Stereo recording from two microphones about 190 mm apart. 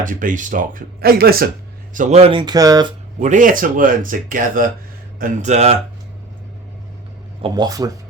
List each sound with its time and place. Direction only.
0.0 s speech: 45° right (ahead or behind)
1.9 s speech: 40° right (ahead or behind); by 2.8 s 20° right (ahead or behind)
3.2 s speech: 40° right (ahead or behind)
7.4 s speech: 20° right (ahead or behind)